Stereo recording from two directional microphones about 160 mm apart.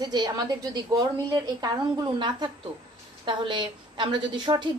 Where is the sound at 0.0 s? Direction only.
25° right (ahead or behind).